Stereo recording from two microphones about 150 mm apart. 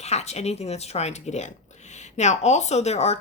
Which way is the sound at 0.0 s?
45° left (ahead or behind).